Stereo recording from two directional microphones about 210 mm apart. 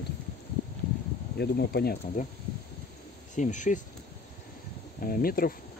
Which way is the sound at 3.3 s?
35° left (ahead or behind).